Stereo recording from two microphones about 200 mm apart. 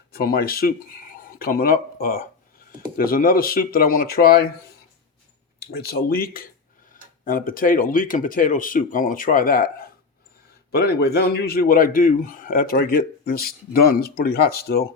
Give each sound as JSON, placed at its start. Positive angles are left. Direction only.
{"t": 0.1, "sound": "a man's voice", "side_deg": 50}
{"t": 5.5, "sound": "a man's voice", "side_deg": 50}